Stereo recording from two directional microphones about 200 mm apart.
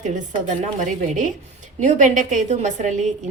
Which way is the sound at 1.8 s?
35° right (ahead or behind).